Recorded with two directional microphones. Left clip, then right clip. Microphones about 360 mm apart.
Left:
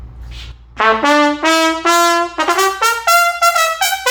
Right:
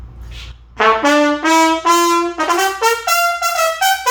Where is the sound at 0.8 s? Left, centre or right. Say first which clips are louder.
Left 1 dB; centre.